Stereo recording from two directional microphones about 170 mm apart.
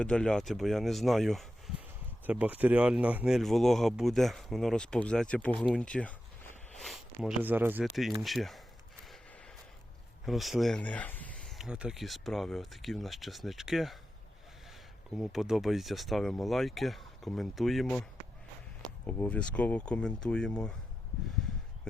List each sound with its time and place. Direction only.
0.0 s speech: 5° left (ahead or behind); by 7.9 s 10° right (ahead or behind)
8.2 s speech: centre (ahead or behind)
9.0 s gasp: centre (ahead or behind)
10.2 s speech: centre (ahead or behind)
11.5 s speech: 5° right (ahead or behind)
19.0 s speech: 10° left (ahead or behind)